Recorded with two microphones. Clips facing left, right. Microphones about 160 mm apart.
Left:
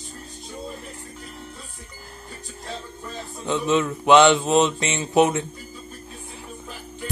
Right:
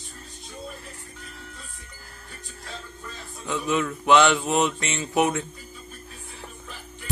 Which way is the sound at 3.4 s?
25° left (ahead or behind).